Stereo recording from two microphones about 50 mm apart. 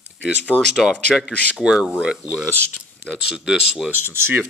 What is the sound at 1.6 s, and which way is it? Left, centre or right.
Speech, centre.